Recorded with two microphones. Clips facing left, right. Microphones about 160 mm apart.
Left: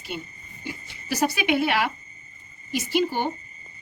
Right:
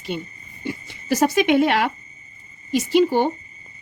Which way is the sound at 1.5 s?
50° right (ahead or behind).